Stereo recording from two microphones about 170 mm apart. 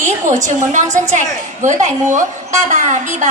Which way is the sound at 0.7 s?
45° right (ahead or behind).